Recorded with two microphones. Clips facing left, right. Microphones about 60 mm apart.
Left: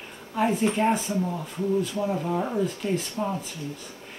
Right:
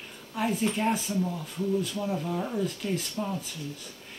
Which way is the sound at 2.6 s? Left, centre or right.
Centre.